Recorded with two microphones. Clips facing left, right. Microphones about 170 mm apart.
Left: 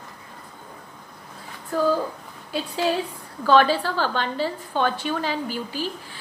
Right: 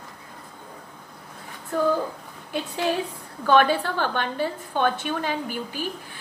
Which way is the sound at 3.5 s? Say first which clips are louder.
Left 1 dB; 55° right (ahead or behind).